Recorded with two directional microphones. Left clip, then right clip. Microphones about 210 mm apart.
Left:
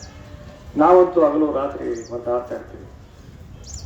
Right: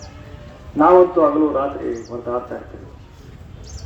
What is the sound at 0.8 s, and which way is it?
A man's voice, 45° left (ahead or behind).